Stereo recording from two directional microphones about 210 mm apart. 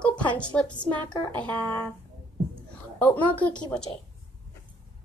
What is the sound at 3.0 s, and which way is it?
Speech, 10° left (ahead or behind).